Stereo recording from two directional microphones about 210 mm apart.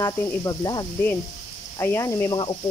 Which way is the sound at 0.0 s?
15° left (ahead or behind).